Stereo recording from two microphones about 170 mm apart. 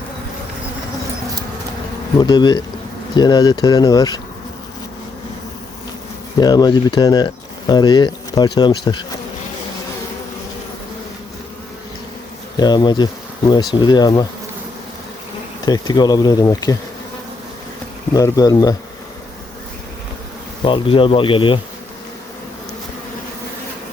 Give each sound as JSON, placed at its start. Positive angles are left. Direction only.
{"t": 2.1, "sound": "speech", "side_deg": 25}
{"t": 6.3, "sound": "speech", "side_deg": 25}
{"t": 12.5, "sound": "speech", "side_deg": 25}
{"t": 15.6, "sound": "speech", "side_deg": 20}
{"t": 18.1, "sound": "speech", "side_deg": 20}
{"t": 20.7, "sound": "speech", "side_deg": 30}